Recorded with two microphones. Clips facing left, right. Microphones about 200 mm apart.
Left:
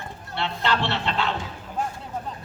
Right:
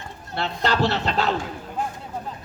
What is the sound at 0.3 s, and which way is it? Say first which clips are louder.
Speech: right 2 dB; 40° right (ahead or behind).